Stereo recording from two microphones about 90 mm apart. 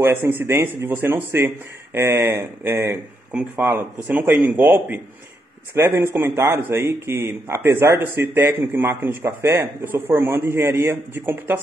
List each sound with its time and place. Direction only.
0.0 s speech: 25° right (ahead or behind)
4.1 s a man's voice: 20° right (ahead or behind)